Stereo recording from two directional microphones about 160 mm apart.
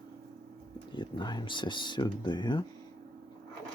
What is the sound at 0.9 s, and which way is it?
Speech, 30° left (ahead or behind).